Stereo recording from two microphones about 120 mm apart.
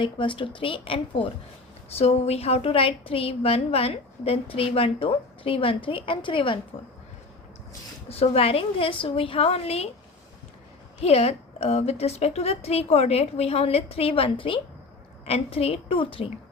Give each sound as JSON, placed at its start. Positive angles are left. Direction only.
{"t": 0.0, "sound": "a woman's voice", "side_deg": 45}
{"t": 2.0, "sound": "a woman's voice", "side_deg": 60}
{"t": 8.1, "sound": "a woman's voice", "side_deg": 55}
{"t": 11.0, "sound": "a woman's voice", "side_deg": 60}